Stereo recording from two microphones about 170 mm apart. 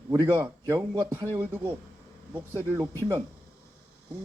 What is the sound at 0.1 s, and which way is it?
A man's voice, 15° right (ahead or behind).